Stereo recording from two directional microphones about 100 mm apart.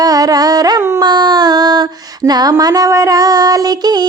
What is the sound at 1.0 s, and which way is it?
Speech, 45° right (ahead or behind).